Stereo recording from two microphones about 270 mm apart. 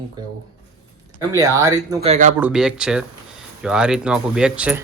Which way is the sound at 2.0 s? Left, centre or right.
Right.